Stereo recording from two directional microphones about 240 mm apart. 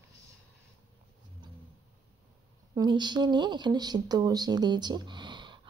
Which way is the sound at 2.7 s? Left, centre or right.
Centre.